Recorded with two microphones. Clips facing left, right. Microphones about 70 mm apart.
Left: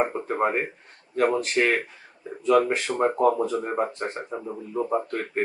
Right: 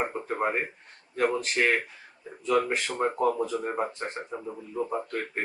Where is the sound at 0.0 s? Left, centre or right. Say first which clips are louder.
Left 4 dB; centre.